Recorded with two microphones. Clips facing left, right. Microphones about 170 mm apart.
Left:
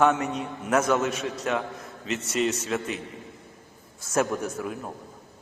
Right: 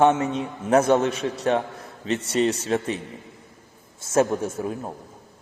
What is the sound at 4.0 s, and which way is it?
Speech, 25° right (ahead or behind).